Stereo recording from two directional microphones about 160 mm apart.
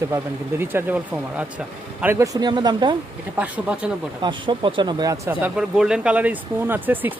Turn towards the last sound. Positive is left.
turn(degrees=-10)  # may be behind; listen again after turning